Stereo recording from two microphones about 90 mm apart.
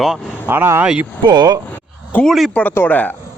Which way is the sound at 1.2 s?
50° right (ahead or behind).